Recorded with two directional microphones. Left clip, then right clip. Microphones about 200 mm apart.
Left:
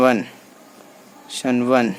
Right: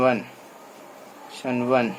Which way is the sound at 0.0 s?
45° left (ahead or behind).